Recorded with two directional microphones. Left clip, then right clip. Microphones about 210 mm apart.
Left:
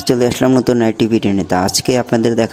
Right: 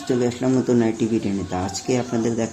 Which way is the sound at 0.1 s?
50° left (ahead or behind).